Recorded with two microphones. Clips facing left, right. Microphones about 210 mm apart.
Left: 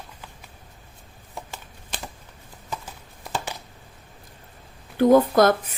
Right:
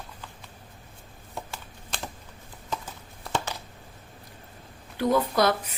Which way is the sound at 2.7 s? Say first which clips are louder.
Right 1 dB; 10° left (ahead or behind).